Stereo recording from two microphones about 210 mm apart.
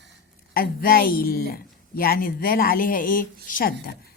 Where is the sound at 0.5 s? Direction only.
45° left (ahead or behind).